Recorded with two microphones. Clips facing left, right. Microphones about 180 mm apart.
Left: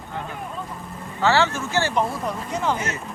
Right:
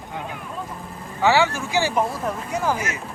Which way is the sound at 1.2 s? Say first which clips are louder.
Right 1 dB; 15° right (ahead or behind).